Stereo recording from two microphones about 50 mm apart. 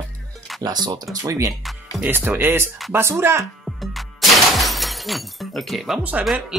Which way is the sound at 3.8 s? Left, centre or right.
Centre.